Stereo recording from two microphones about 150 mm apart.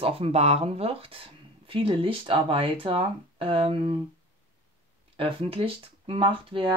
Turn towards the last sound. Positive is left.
turn(degrees=-35)  # may be behind; listen again after turning